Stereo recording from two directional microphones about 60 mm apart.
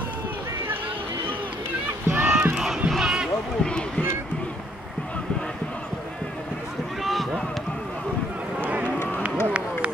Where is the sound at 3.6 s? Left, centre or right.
Centre.